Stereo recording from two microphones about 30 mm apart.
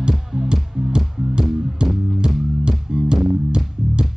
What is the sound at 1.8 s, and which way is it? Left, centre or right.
Music, right.